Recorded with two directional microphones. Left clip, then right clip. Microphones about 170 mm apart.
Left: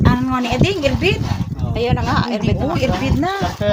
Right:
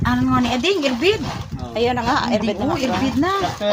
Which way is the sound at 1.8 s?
5° right (ahead or behind).